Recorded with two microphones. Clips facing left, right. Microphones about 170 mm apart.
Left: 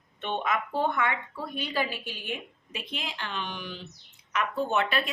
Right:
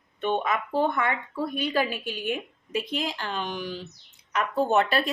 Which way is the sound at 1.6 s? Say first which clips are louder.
Right 3 dB; 45° right (ahead or behind).